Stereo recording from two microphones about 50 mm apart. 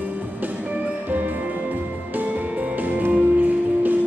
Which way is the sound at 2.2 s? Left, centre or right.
Right.